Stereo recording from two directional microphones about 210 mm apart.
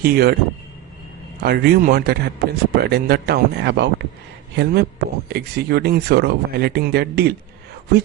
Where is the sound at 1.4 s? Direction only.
50° right (ahead or behind).